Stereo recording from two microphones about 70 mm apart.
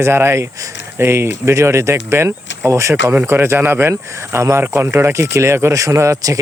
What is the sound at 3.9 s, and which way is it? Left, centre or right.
Speech, right.